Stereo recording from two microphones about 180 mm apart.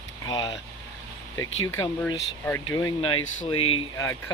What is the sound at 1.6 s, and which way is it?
Speech, 15° left (ahead or behind).